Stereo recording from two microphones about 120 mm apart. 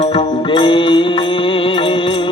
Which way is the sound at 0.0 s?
50° left (ahead or behind).